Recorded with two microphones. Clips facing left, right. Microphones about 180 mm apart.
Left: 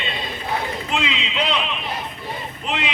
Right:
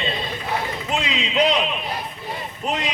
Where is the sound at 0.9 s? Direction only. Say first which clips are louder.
Right 2 dB; 40° right (ahead or behind).